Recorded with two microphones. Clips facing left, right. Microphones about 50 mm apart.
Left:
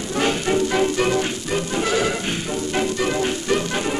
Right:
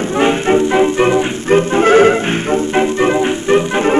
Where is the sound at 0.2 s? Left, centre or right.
Right.